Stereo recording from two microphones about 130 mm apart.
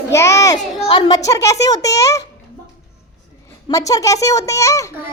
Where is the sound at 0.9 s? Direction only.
35° left (ahead or behind).